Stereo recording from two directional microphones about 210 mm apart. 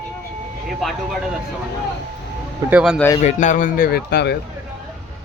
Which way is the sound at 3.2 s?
35° left (ahead or behind).